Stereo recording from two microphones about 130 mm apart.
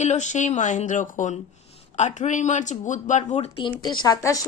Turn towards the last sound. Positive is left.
turn(degrees=30)  # may be behind; listen again after turning